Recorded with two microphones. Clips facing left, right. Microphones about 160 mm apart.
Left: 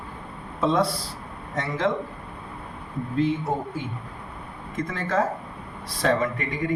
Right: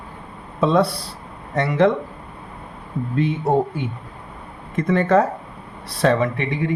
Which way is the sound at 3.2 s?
65° right (ahead or behind).